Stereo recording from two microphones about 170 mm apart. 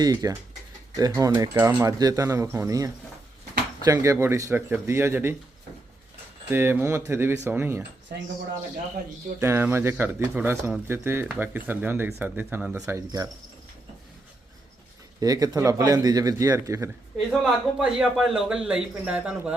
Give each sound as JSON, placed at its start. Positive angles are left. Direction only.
{"t": 0.0, "sound": "speech", "side_deg": -20}
{"t": 6.5, "sound": "speech", "side_deg": -10}
{"t": 9.4, "sound": "speech", "side_deg": -15}
{"t": 15.2, "sound": "speech", "side_deg": -20}
{"t": 17.4, "sound": "a man's voice", "side_deg": -5}